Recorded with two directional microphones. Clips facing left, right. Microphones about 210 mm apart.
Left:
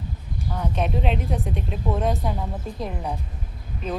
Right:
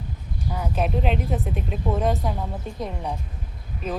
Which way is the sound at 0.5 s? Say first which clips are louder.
Even; 5° right (ahead or behind).